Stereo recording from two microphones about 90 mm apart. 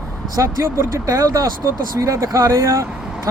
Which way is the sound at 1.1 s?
40° right (ahead or behind).